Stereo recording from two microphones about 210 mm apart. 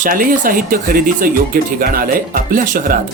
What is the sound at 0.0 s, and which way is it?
Speech, 40° right (ahead or behind).